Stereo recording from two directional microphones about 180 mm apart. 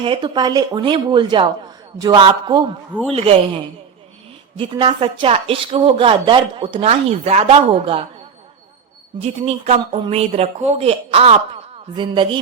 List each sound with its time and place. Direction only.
0.0 s speech: 25° right (ahead or behind)
9.2 s speech: 35° right (ahead or behind)